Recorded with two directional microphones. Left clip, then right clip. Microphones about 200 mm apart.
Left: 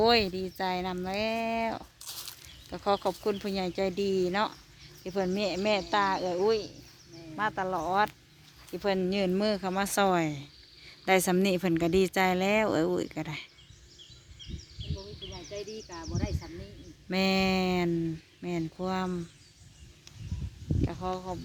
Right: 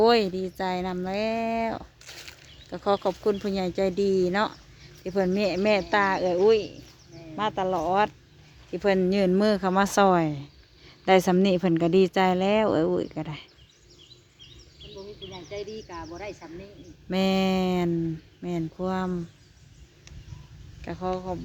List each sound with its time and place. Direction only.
0.0 s speech: 5° right (ahead or behind)
2.0 s a sound: 35° right (ahead or behind)
2.6 s speech: 5° right (ahead or behind)
15.2 s a sound: 5° right (ahead or behind)
15.9 s speech: 5° right (ahead or behind)
20.8 s speech: 10° right (ahead or behind)